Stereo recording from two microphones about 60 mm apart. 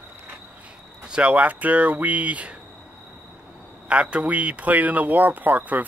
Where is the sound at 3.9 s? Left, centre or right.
Centre.